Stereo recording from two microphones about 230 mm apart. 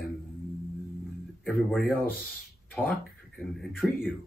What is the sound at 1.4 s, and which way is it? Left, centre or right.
Speech, centre.